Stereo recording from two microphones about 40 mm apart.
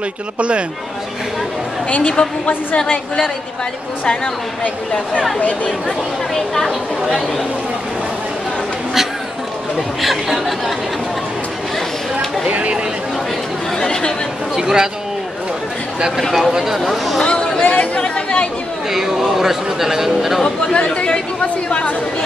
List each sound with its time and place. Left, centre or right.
0.4 s speech: right
2.0 s speech: left
5.7 s speech: centre
10.0 s speech: centre
12.4 s speech: right
13.7 s speech: centre
14.5 s speech: centre
16.3 s speech: centre
17.2 s a sound: left
17.6 s speech: left
18.9 s speech: centre
20.4 s speech: left